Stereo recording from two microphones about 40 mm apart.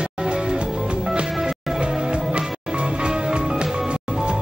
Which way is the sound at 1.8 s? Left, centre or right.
Centre.